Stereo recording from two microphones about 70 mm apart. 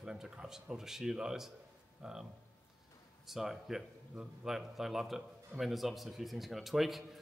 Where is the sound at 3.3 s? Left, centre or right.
Centre.